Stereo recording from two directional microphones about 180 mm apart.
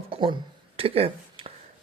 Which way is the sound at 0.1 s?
30° right (ahead or behind).